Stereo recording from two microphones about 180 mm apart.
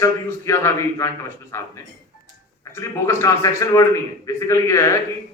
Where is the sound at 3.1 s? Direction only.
15° left (ahead or behind).